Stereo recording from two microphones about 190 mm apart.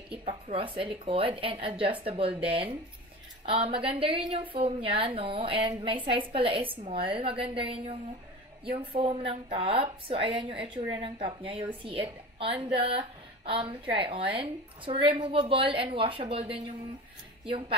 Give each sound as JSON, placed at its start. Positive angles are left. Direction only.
{"t": 0.1, "sound": "a woman's voice", "side_deg": -30}